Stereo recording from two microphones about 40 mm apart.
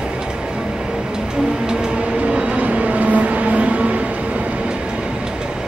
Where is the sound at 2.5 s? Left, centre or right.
Right.